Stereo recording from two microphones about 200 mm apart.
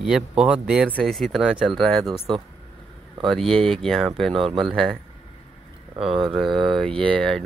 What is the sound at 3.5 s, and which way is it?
Speech, 25° right (ahead or behind).